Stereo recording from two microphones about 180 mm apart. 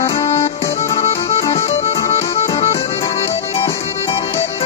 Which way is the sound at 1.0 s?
35° left (ahead or behind).